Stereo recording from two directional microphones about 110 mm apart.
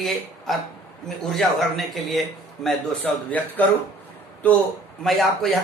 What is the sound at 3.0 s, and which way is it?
A man's voice, 15° left (ahead or behind).